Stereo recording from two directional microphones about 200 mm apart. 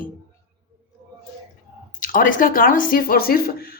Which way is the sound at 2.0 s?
45° left (ahead or behind).